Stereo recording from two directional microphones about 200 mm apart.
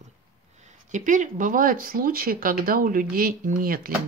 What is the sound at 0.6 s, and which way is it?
Speech, 35° right (ahead or behind).